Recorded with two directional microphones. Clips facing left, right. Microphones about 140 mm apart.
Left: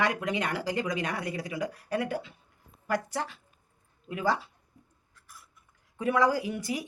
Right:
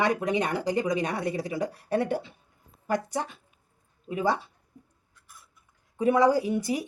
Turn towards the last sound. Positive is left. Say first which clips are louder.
# right 5 dB
turn(degrees=-25)  # may be behind; listen again after turning